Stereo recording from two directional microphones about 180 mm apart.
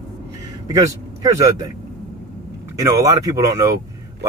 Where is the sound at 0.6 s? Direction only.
20° right (ahead or behind).